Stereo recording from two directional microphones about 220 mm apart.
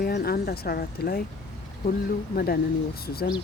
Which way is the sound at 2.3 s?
45° left (ahead or behind).